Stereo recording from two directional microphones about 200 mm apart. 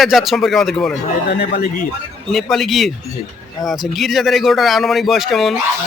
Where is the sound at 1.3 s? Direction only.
55° left (ahead or behind).